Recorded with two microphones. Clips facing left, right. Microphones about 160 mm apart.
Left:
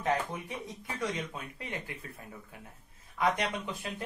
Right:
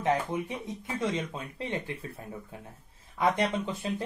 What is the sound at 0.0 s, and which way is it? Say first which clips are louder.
Speech: right 4 dB; 20° right (ahead or behind).